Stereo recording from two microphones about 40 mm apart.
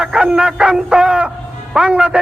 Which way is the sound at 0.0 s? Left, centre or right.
Right.